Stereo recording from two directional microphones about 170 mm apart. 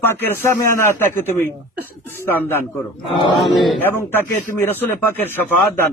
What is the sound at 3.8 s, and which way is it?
A man's voice, 15° left (ahead or behind).